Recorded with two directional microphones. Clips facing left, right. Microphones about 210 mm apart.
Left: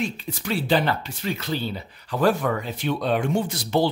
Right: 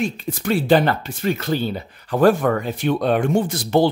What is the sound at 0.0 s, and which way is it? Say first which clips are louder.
Speech: right 5 dB; 50° right (ahead or behind).